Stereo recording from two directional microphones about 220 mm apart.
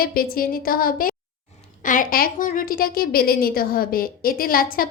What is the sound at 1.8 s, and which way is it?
A woman's voice, 35° left (ahead or behind).